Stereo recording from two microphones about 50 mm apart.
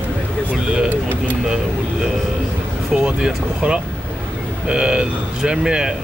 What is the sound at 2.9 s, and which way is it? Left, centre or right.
Speech, centre.